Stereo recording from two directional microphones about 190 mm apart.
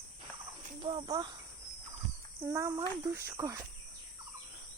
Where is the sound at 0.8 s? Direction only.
25° right (ahead or behind).